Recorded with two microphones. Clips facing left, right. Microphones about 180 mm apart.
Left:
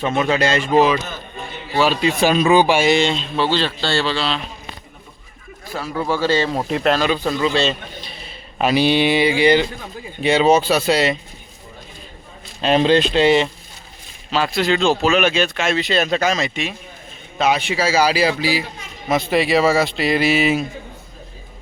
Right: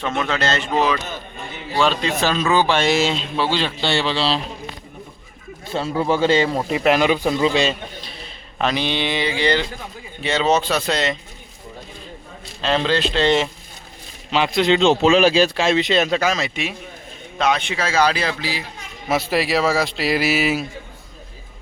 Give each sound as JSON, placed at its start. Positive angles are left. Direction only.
{"t": 0.0, "sound": "speech", "side_deg": 10}
{"t": 1.8, "sound": "speech", "side_deg": 10}
{"t": 2.9, "sound": "speech", "side_deg": -5}
{"t": 5.6, "sound": "speech", "side_deg": -25}
{"t": 6.5, "sound": "speech", "side_deg": 0}
{"t": 6.9, "sound": "speech", "side_deg": -15}
{"t": 8.5, "sound": "speech", "side_deg": 10}
{"t": 12.6, "sound": "speech", "side_deg": 15}
{"t": 14.3, "sound": "speech", "side_deg": -20}
{"t": 16.0, "sound": "speech", "side_deg": -5}
{"t": 17.3, "sound": "speech", "side_deg": 5}
{"t": 19.0, "sound": "speech", "side_deg": -5}